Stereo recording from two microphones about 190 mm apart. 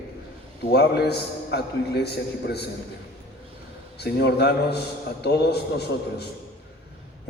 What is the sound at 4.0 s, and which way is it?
A man's voice, 60° left (ahead or behind).